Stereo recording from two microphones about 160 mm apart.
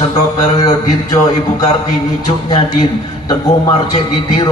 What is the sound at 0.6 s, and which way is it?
A man's voice, 25° left (ahead or behind).